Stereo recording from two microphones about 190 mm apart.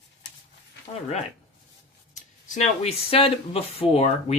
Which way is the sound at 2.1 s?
40° left (ahead or behind).